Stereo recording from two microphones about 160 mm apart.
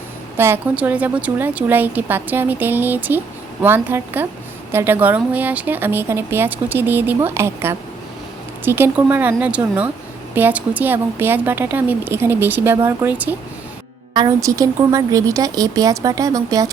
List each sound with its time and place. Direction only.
0.3 s a woman's voice: 15° right (ahead or behind)
14.1 s speech: 25° right (ahead or behind)